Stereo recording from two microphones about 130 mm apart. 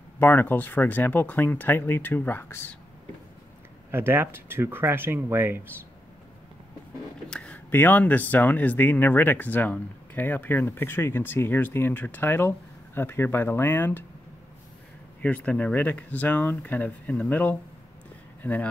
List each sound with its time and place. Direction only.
0.2 s speech: 15° left (ahead or behind)
3.9 s speech: 15° right (ahead or behind)
7.2 s speech: 10° left (ahead or behind)
15.2 s speech: 10° left (ahead or behind)